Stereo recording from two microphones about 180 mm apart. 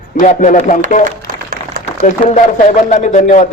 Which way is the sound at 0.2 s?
45° left (ahead or behind).